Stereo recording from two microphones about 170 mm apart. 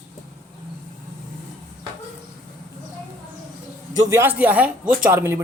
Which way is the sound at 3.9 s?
20° right (ahead or behind).